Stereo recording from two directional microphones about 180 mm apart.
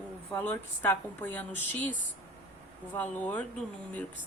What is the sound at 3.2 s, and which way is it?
Speech, 10° left (ahead or behind).